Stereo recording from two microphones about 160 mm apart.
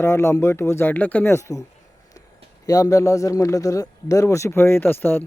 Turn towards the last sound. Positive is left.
turn(degrees=15)  # may be behind; listen again after turning